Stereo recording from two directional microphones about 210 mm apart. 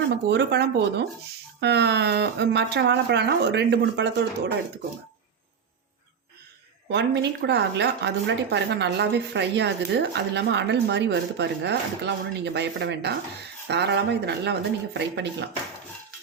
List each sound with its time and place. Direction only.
0.3 s speech: 55° right (ahead or behind)
6.8 s a woman's voice: 55° right (ahead or behind)